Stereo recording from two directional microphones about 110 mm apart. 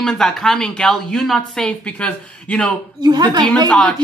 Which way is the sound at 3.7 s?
10° left (ahead or behind).